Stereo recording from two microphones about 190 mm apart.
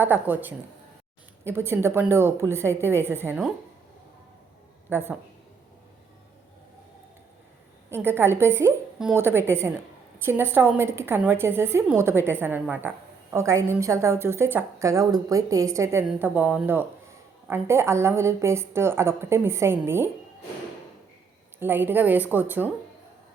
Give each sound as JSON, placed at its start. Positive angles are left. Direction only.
{"t": 0.0, "sound": "a woman's voice", "side_deg": -10}
{"t": 4.9, "sound": "a woman's voice", "side_deg": -10}
{"t": 7.9, "sound": "a woman's voice", "side_deg": -10}
{"t": 21.6, "sound": "a woman's voice", "side_deg": -10}